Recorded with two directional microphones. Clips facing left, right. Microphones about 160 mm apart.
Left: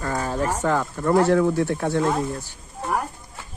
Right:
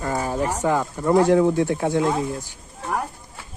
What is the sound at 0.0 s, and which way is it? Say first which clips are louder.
Speech: right 1 dB; 15° right (ahead or behind).